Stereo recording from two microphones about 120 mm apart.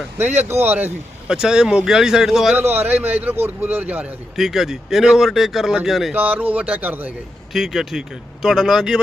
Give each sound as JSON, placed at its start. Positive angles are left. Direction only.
{"t": 0.2, "sound": "speech", "side_deg": -20}
{"t": 1.3, "sound": "a man's voice", "side_deg": -5}
{"t": 2.6, "sound": "a man's voice", "side_deg": -20}
{"t": 6.1, "sound": "speech", "side_deg": -15}
{"t": 7.5, "sound": "a man's voice", "side_deg": -5}